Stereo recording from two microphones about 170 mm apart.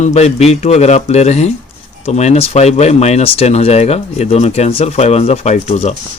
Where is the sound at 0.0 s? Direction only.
40° left (ahead or behind).